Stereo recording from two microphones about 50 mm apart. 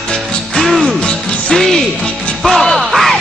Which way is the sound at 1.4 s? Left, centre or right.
Centre.